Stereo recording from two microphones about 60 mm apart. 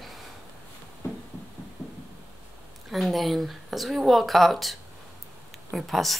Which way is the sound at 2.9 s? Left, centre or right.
Centre.